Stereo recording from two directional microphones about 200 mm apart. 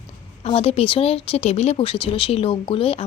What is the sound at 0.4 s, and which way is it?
Speech, 30° left (ahead or behind).